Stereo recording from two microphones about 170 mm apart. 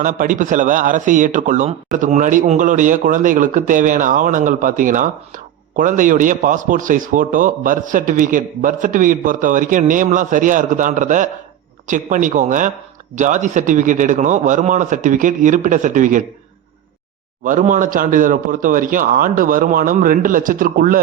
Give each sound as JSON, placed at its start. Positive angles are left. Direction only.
{"t": 0.0, "sound": "a man's voice", "side_deg": -50}
{"t": 17.4, "sound": "a man's voice", "side_deg": -50}